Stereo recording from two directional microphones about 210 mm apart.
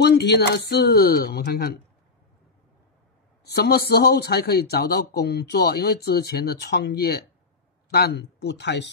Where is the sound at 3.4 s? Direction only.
50° left (ahead or behind).